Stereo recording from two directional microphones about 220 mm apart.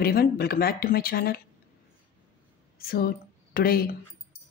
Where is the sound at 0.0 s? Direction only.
45° left (ahead or behind).